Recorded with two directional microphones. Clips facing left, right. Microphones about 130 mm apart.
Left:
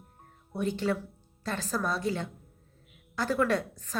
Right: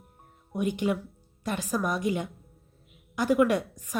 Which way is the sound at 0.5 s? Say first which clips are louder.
Right 2 dB; 15° right (ahead or behind).